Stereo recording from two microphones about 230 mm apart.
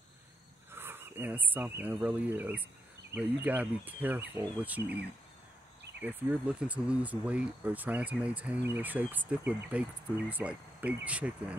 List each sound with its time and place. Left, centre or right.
0.7 s speech: centre
6.0 s speech: centre